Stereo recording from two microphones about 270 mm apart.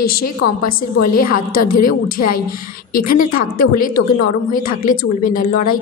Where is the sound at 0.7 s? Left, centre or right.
Left.